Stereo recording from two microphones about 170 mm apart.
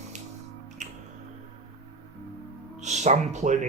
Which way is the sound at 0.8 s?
45° right (ahead or behind).